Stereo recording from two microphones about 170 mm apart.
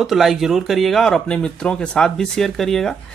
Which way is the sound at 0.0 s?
Centre (ahead or behind).